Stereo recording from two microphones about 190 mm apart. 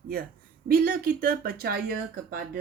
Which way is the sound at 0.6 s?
50° right (ahead or behind).